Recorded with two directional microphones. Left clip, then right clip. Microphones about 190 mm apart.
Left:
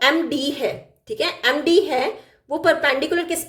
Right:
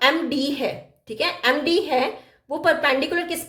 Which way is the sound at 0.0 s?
10° left (ahead or behind).